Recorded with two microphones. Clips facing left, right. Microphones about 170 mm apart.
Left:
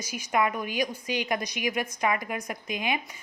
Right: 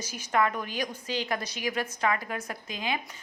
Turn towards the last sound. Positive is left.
turn(degrees=15)  # may be behind; listen again after turning